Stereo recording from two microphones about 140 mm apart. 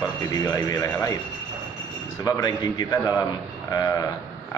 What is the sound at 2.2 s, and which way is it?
Speech, 25° left (ahead or behind).